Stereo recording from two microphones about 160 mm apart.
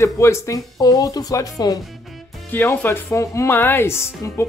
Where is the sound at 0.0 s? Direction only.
15° left (ahead or behind).